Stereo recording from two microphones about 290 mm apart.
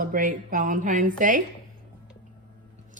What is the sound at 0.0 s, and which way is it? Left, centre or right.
Speech, right.